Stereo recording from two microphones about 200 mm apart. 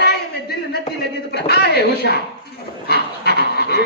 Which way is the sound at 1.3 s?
50° left (ahead or behind).